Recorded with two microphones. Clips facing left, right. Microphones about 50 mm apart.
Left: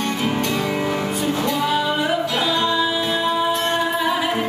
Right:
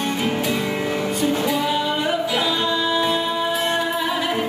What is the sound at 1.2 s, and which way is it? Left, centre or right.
Music, centre.